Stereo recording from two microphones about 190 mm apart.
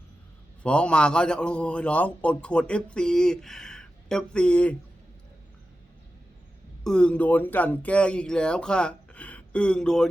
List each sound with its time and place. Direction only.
0.6 s a man's voice: 5° left (ahead or behind)
6.8 s a man's voice: 5° left (ahead or behind)